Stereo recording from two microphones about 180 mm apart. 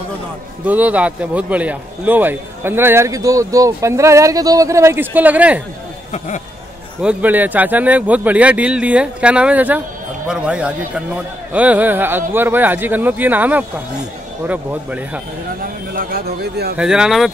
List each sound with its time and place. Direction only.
0.7 s a man's voice: 10° right (ahead or behind)
6.1 s speech: 40° left (ahead or behind)
7.0 s a man's voice: 5° right (ahead or behind)
15.6 s a man's voice: 55° right (ahead or behind)
16.7 s speech: 5° right (ahead or behind)